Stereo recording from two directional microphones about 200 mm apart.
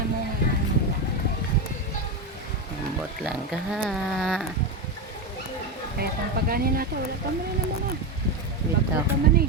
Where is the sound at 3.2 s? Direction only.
Centre (ahead or behind).